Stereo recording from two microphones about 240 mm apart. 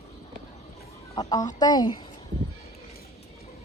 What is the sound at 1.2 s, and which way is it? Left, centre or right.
Speech, centre.